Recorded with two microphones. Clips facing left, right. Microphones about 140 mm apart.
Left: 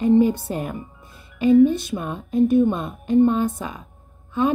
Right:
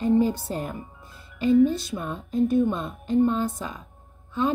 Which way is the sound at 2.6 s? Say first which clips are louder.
Left 4 dB; 55° left (ahead or behind).